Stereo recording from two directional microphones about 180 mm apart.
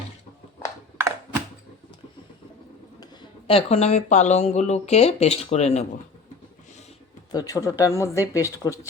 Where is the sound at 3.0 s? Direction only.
30° left (ahead or behind).